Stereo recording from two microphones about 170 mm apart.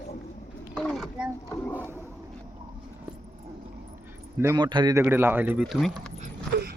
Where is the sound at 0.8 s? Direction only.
5° left (ahead or behind).